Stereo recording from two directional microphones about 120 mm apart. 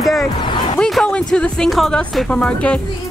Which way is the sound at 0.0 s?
Centre (ahead or behind).